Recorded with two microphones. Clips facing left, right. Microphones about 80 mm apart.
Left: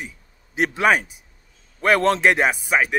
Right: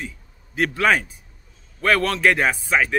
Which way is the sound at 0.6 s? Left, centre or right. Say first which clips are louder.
Left 1 dB; centre.